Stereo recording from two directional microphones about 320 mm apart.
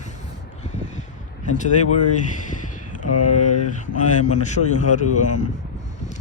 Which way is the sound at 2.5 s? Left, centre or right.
Left.